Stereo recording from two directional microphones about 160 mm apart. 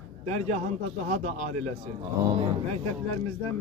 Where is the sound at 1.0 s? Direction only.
45° right (ahead or behind).